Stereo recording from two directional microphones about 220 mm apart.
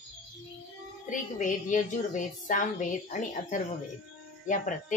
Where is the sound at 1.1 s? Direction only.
35° left (ahead or behind).